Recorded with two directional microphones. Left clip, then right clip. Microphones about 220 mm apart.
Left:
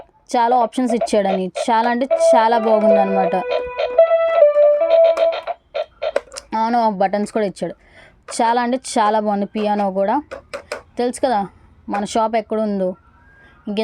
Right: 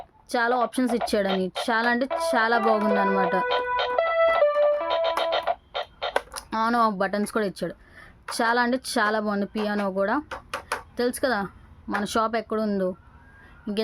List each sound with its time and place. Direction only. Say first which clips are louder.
0.3 s a woman's voice: left 8 dB; 20° left (ahead or behind)
2.6 s speech: left 9 dB; 5° right (ahead or behind)
3.4 s music: left 3 dB; 5° right (ahead or behind)
6.3 s a woman's voice: left 5 dB; 15° left (ahead or behind)